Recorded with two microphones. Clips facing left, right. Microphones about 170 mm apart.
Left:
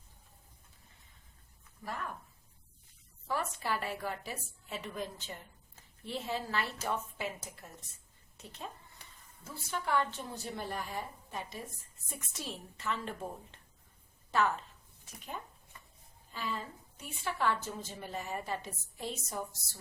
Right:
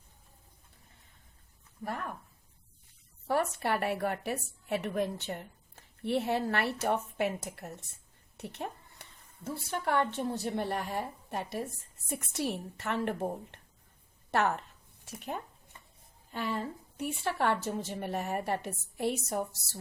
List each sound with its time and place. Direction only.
3.2 s a woman's voice: 65° right (ahead or behind)
8.4 s a sound: 65° right (ahead or behind)
9.8 s a woman's voice: 65° right (ahead or behind)